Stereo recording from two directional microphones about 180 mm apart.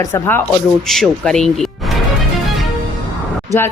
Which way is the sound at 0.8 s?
Centre (ahead or behind).